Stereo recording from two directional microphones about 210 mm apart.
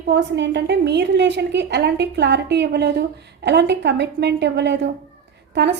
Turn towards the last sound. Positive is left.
turn(degrees=-55)  # may be behind; listen again after turning